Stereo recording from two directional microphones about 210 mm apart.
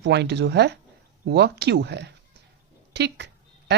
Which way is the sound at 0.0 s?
55° right (ahead or behind).